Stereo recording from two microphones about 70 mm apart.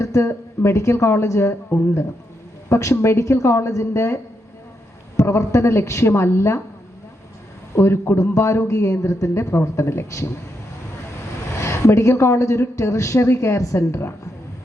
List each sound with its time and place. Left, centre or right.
0.0 s a woman's voice: left
2.6 s a woman's voice: left
7.8 s a woman's voice: left
11.5 s a woman's voice: left